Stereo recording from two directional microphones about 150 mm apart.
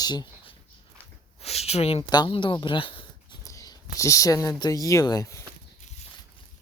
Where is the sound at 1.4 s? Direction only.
45° left (ahead or behind).